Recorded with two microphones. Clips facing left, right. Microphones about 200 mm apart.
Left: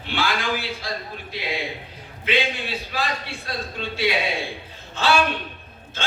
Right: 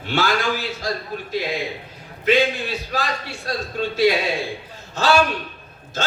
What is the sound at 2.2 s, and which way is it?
A man's voice, 45° right (ahead or behind).